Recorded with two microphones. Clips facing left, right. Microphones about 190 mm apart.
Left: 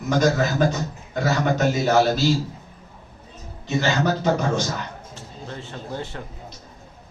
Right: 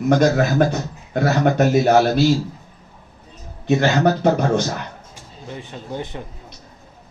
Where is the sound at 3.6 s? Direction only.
60° right (ahead or behind).